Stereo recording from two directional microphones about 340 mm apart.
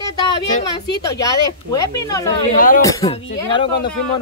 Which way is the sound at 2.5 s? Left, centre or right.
Left.